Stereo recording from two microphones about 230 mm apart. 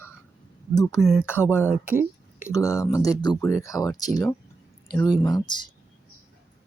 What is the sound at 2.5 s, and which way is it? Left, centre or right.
Speech, centre.